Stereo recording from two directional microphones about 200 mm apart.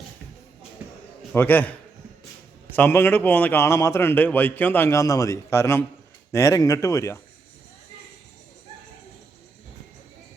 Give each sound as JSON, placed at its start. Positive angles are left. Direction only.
{"t": 1.3, "sound": "a man's voice", "side_deg": 10}
{"t": 2.7, "sound": "a man's voice", "side_deg": 10}